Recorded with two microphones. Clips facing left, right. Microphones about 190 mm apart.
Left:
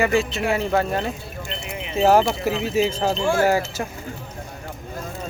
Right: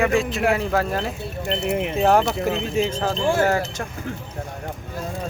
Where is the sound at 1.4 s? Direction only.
60° right (ahead or behind).